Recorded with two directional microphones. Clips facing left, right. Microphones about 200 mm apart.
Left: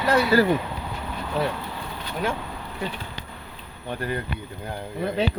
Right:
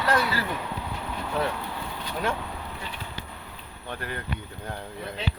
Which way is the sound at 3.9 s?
15° left (ahead or behind).